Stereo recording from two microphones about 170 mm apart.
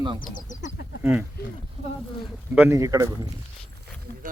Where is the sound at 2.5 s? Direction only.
15° right (ahead or behind).